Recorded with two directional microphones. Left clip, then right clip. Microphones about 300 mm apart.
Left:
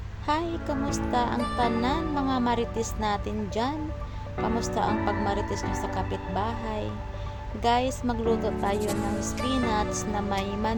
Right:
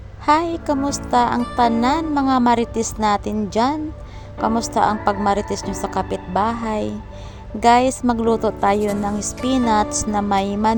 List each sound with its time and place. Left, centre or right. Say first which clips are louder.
0.3 s a woman's voice: right 11 dB; right